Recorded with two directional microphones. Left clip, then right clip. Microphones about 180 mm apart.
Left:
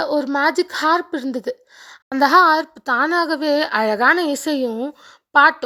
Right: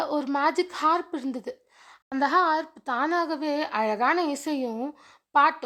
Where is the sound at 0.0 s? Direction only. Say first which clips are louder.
Left 7 dB; 25° left (ahead or behind).